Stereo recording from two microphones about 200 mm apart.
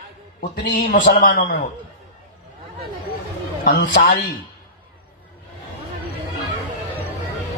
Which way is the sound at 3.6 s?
45° left (ahead or behind).